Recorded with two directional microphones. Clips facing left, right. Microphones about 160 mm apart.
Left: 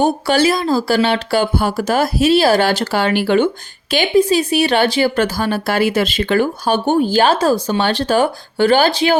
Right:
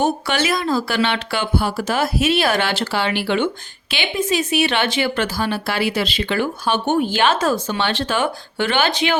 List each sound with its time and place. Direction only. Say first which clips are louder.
0.0 s speech: left 5 dB; 35° left (ahead or behind)